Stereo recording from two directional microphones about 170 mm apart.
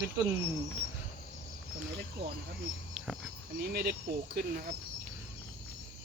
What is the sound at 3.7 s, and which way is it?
Speech, 60° right (ahead or behind).